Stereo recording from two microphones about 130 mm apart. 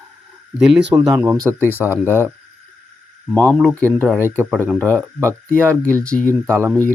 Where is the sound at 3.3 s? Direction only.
5° left (ahead or behind).